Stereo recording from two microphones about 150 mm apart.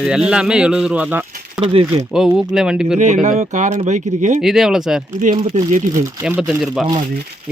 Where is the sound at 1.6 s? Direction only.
40° right (ahead or behind).